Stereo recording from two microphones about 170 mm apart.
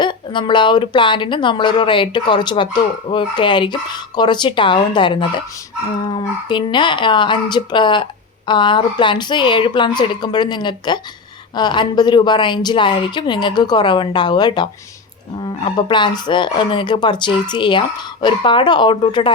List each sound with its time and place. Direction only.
0.0 s speech: 30° left (ahead or behind)
6.1 s speech: 30° left (ahead or behind)